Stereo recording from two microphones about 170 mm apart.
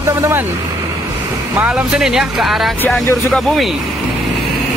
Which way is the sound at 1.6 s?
5° right (ahead or behind).